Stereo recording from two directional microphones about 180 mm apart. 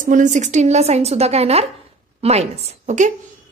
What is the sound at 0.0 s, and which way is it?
A woman's voice, 45° right (ahead or behind).